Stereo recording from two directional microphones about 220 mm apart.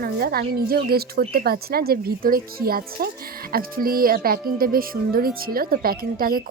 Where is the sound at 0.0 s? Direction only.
45° right (ahead or behind).